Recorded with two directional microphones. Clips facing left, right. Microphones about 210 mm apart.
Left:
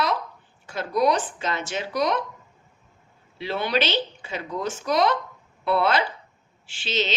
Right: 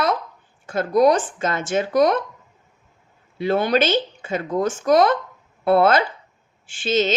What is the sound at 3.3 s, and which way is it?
A woman's voice, 50° right (ahead or behind).